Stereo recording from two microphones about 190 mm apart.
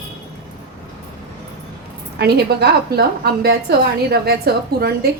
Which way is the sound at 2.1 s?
60° right (ahead or behind).